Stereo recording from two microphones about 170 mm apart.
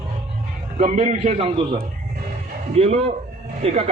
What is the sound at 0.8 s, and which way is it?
A man's voice, 40° right (ahead or behind).